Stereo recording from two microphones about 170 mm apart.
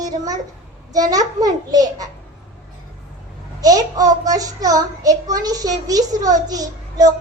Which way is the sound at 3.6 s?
20° right (ahead or behind).